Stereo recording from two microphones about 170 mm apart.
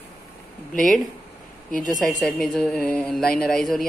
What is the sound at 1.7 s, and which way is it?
Speech, 50° left (ahead or behind).